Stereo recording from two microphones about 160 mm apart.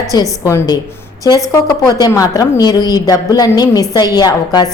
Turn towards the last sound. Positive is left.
turn(degrees=25)  # may be behind; listen again after turning